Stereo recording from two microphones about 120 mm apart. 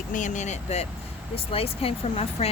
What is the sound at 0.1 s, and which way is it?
Speech, 90° left.